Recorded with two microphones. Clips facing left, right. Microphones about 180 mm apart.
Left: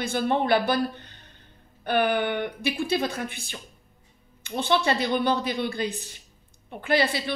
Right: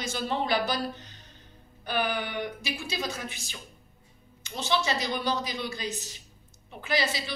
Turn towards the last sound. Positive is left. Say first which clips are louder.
# left 6 dB
turn(degrees=60)  # may be behind; listen again after turning